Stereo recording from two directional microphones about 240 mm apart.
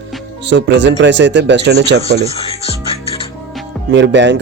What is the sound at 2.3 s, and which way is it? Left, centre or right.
Speech, left.